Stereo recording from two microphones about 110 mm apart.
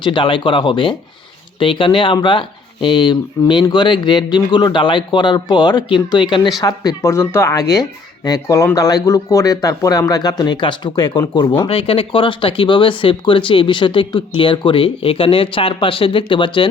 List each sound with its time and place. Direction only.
0.0 s speech: 50° left (ahead or behind)
6.6 s speech: 35° left (ahead or behind)